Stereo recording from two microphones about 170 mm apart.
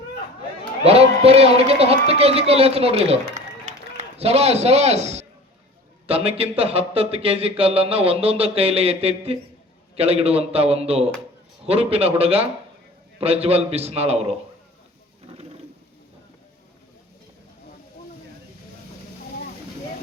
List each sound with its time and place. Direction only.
0.9 s speech: 35° right (ahead or behind)
3.3 s run: 45° right (ahead or behind)
6.1 s speech: 35° right (ahead or behind)